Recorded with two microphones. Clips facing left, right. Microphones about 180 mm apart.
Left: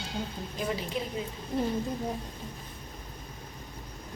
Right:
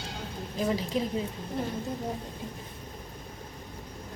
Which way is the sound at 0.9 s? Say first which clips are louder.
Right 4 dB; 35° right (ahead or behind).